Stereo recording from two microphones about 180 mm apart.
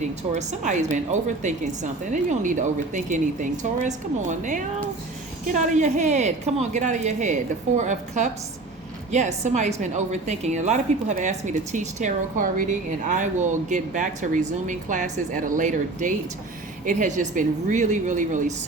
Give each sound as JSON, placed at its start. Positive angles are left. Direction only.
{"t": 0.3, "sound": "a woman's voice", "side_deg": -40}